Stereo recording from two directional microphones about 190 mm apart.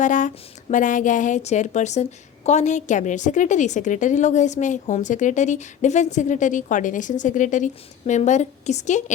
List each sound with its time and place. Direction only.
0.0 s speech: 40° left (ahead or behind)